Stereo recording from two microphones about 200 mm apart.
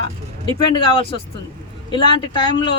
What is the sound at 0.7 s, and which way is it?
Speech, 25° left (ahead or behind).